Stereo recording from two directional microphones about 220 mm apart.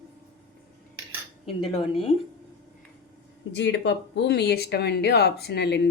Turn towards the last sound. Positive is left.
turn(degrees=50)  # may be behind; listen again after turning